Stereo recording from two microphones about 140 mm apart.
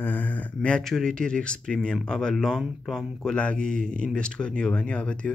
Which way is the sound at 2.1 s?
5° left (ahead or behind).